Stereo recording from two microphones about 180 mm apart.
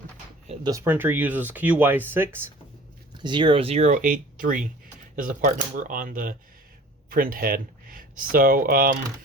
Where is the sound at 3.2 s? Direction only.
25° right (ahead or behind).